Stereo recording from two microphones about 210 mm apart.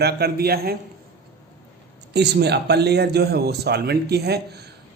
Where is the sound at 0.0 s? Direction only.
50° right (ahead or behind).